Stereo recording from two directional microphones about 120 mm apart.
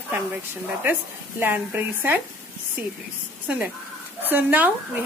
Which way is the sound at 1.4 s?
15° right (ahead or behind).